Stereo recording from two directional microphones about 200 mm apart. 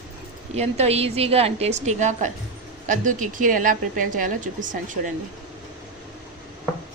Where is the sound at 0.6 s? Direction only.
30° right (ahead or behind).